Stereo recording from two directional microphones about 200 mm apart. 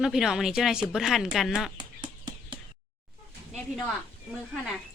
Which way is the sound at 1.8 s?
25° right (ahead or behind).